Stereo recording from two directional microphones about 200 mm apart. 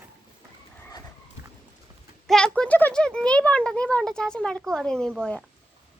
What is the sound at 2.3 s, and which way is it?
A child's voice, 5° left (ahead or behind).